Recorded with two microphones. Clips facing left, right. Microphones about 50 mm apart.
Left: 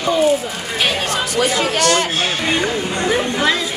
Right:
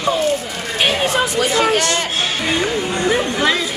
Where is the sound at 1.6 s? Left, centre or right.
Right.